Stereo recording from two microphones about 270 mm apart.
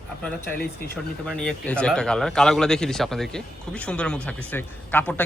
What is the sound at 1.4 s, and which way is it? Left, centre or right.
A man's voice, centre.